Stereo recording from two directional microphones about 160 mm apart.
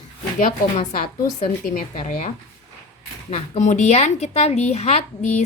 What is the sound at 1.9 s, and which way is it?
Speech, 50° left (ahead or behind).